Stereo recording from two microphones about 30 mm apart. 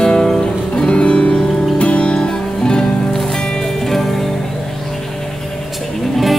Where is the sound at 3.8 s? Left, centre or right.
Centre.